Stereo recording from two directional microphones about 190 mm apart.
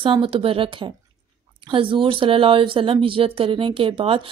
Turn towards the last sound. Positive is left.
turn(degrees=-30)  # may be behind; listen again after turning